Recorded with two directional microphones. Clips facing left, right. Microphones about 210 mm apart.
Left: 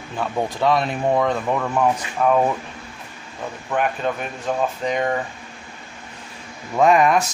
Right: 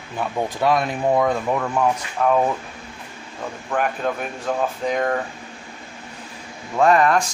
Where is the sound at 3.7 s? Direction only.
Centre (ahead or behind).